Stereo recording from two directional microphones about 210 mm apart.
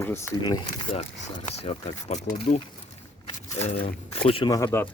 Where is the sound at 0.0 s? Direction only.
10° left (ahead or behind).